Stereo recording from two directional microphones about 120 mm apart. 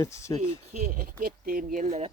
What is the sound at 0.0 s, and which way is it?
Speech, 25° left (ahead or behind).